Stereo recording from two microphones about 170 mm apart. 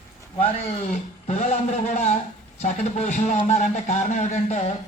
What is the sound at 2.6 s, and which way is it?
A man's voice, 45° left (ahead or behind).